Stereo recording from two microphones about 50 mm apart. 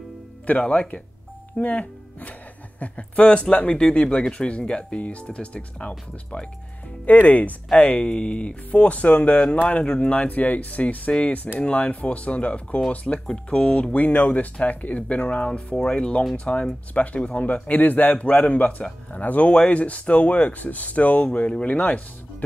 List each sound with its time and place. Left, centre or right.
0.5 s speech: left